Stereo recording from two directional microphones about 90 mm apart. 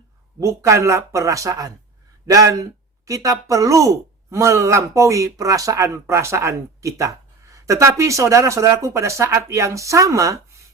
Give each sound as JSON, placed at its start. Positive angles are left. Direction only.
{"t": 0.3, "sound": "speech", "side_deg": -35}